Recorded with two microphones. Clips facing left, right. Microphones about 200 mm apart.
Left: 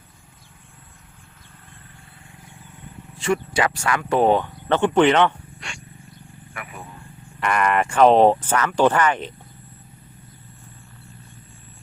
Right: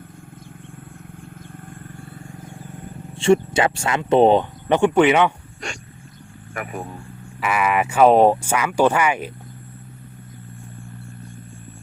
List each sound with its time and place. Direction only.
3.2 s speech: 25° right (ahead or behind); by 5.3 s 10° right (ahead or behind)
5.5 s wild animals: 40° right (ahead or behind)
6.5 s speech: 45° right (ahead or behind)
7.4 s speech: 5° right (ahead or behind)